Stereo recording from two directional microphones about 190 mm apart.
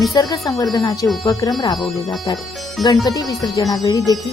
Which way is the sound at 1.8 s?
Centre (ahead or behind).